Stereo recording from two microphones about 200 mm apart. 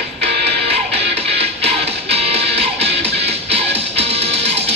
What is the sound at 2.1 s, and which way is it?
Music, 30° right (ahead or behind).